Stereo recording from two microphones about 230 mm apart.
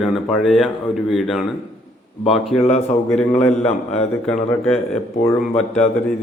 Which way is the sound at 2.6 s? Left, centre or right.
Left.